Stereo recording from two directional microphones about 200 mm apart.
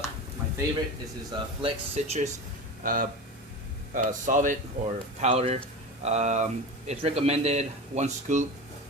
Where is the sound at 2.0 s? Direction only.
35° right (ahead or behind).